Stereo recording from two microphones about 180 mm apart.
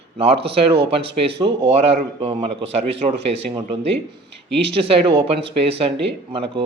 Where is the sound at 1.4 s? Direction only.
30° right (ahead or behind).